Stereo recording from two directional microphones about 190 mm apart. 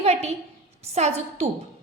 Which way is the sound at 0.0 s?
35° right (ahead or behind).